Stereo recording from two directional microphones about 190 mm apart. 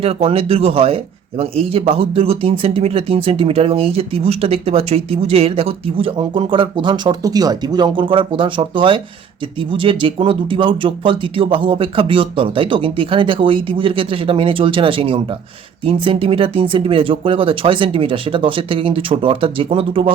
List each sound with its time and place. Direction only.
0.0 s speech: 30° right (ahead or behind)